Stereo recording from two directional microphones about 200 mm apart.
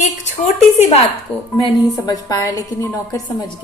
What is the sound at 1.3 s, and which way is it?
Dishes, 5° left (ahead or behind).